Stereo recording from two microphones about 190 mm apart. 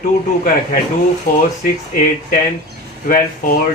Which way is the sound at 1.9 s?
50° left (ahead or behind).